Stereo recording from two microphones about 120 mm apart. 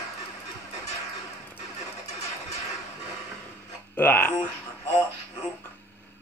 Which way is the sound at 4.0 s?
15° left (ahead or behind).